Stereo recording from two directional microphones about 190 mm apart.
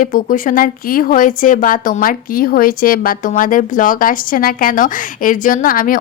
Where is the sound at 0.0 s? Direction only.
45° left (ahead or behind).